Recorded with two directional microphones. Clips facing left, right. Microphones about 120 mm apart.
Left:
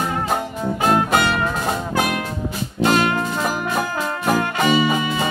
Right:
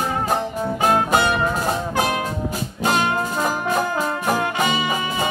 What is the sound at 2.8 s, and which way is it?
Music, 15° right (ahead or behind).